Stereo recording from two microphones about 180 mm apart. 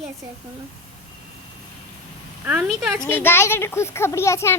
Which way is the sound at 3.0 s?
10° left (ahead or behind).